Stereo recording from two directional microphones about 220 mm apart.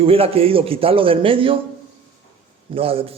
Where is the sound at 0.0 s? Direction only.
25° right (ahead or behind).